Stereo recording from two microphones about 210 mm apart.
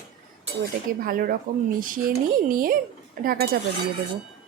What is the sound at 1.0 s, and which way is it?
Speech, 45° right (ahead or behind).